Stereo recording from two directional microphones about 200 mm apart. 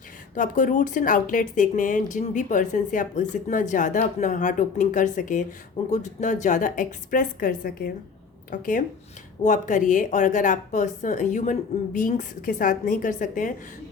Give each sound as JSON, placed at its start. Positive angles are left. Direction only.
{"t": 0.3, "sound": "speech", "side_deg": 40}